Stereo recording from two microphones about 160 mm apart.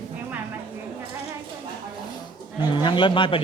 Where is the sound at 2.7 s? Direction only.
30° left (ahead or behind).